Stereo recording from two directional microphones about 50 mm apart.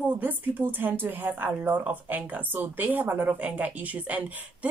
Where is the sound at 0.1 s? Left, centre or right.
Right.